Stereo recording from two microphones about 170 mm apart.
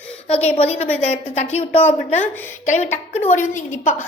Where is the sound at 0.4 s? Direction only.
35° left (ahead or behind).